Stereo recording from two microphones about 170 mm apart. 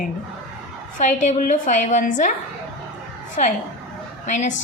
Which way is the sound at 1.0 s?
45° left (ahead or behind).